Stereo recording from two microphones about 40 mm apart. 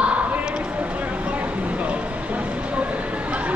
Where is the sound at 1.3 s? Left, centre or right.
Right.